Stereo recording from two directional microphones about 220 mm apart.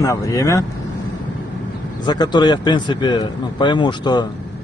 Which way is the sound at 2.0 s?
20° left (ahead or behind).